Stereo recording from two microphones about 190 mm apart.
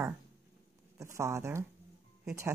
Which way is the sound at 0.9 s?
15° right (ahead or behind).